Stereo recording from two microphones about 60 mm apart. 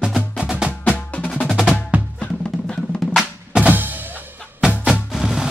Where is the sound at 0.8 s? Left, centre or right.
Left.